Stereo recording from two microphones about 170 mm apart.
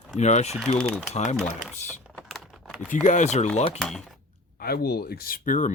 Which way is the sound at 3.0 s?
45° left (ahead or behind).